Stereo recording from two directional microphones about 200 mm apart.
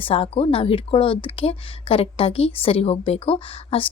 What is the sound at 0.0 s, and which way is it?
Speech, 30° left (ahead or behind).